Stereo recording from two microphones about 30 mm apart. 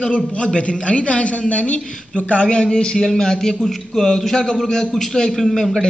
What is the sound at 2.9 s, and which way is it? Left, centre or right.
A man's voice, centre.